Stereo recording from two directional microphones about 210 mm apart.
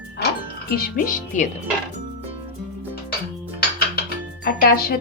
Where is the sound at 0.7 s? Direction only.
40° left (ahead or behind).